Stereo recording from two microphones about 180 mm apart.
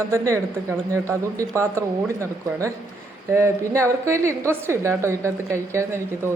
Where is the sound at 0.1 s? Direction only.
15° right (ahead or behind).